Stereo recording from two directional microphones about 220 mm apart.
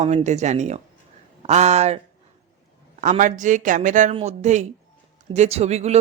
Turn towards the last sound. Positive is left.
turn(degrees=-30)  # may be behind; listen again after turning